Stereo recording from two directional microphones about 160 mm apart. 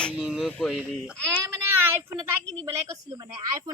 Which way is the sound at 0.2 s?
5° right (ahead or behind).